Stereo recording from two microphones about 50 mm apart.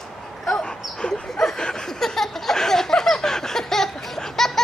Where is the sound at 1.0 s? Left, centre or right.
Centre.